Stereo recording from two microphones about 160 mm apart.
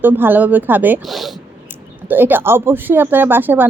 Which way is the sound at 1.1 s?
Centre (ahead or behind).